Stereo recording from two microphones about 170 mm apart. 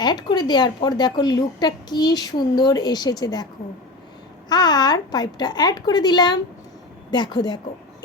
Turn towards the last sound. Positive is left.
turn(degrees=25)  # may be behind; listen again after turning